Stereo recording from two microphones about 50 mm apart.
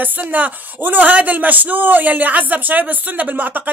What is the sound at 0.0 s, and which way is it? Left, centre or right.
Speech, right.